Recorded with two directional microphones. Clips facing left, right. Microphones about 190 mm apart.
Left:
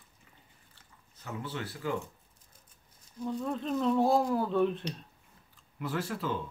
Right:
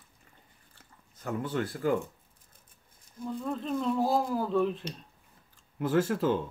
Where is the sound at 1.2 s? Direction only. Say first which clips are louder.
Right 7 dB; 50° right (ahead or behind).